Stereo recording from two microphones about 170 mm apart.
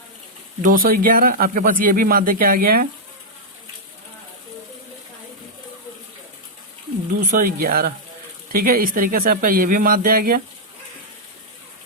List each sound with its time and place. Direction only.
0.6 s speech: 55° right (ahead or behind)
7.3 s speech: 60° right (ahead or behind)